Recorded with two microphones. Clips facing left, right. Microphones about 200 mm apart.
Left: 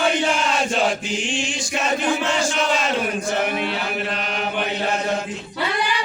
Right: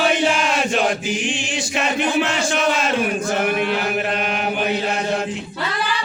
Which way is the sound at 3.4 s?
55° right (ahead or behind).